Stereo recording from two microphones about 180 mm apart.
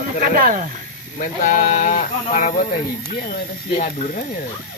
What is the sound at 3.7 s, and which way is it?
Speech, 45° left (ahead or behind).